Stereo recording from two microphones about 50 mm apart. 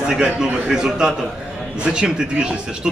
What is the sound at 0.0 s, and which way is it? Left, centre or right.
A man's voice, centre.